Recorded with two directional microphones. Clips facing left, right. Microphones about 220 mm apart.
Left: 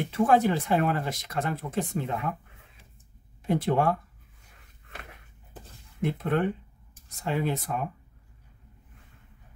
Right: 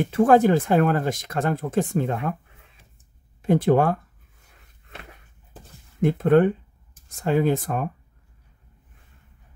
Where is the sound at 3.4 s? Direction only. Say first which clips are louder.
Right 7 dB; 50° right (ahead or behind).